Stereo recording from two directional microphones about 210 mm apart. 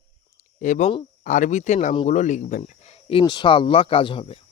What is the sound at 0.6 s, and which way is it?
Speech, 40° left (ahead or behind).